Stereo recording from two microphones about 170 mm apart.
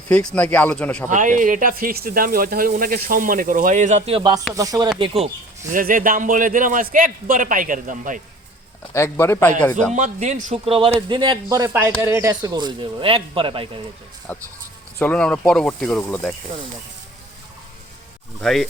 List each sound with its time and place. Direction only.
0.1 s speech: 5° left (ahead or behind)
1.1 s speech: 50° right (ahead or behind); by 4.9 s 20° right (ahead or behind)
4.9 s speech: 35° right (ahead or behind)
5.7 s speech: 55° right (ahead or behind)
8.9 s speech: 15° left (ahead or behind)
9.9 s speech: 45° right (ahead or behind)
14.3 s speech: 10° left (ahead or behind)
18.3 s speech: centre (ahead or behind)